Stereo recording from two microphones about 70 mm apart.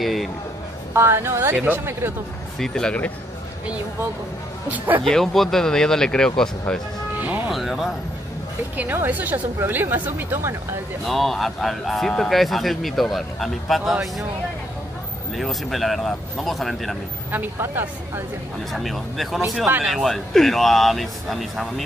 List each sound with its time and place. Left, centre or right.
0.0 s a sound: centre
0.9 s speech: right
2.6 s speech: centre
4.6 s speech: right
5.0 s speech: centre
7.2 s music: right
7.5 s speech: centre
8.9 s speech: right
11.1 s speech: centre
15.3 s speech: centre
17.3 s speech: right
18.7 s speech: centre